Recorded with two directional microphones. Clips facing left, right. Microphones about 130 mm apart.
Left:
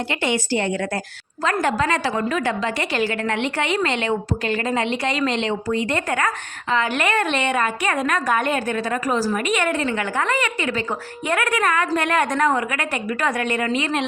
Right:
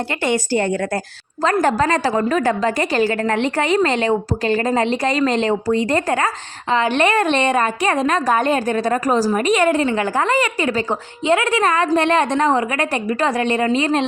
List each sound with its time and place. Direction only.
0.3 s a woman's voice: 45° right (ahead or behind)